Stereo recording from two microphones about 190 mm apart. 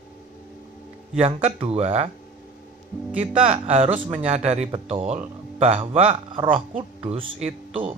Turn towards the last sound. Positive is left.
turn(degrees=-30)  # may be behind; listen again after turning